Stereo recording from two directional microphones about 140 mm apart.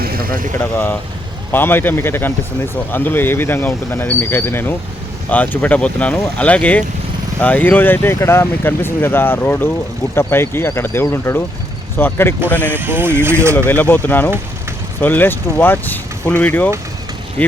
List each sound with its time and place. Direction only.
0.0 s vehicle: 90° right
0.6 s speech: 15° left (ahead or behind)
12.7 s speech: 15° right (ahead or behind)
13.7 s speech: 15° left (ahead or behind)